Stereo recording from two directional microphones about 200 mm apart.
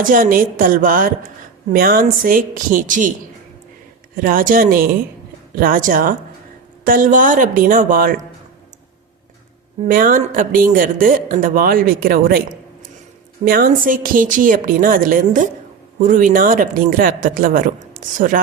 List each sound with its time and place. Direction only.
0.0 s speech: 45° right (ahead or behind)
4.2 s speech: 45° right (ahead or behind)
9.8 s speech: 40° right (ahead or behind)